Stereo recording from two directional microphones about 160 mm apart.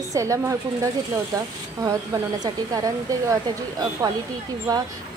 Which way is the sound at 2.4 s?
25° right (ahead or behind).